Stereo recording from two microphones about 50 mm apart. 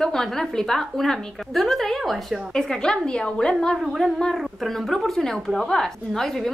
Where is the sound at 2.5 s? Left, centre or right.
Centre.